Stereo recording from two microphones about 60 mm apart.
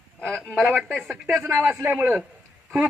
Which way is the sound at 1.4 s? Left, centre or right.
Right.